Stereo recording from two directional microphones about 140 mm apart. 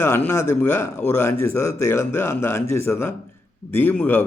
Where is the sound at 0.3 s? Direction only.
20° left (ahead or behind).